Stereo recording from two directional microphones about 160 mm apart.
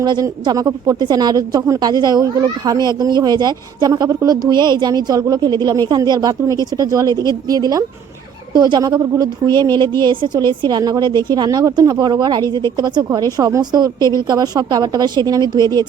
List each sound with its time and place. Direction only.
0.0 s speech: 25° right (ahead or behind)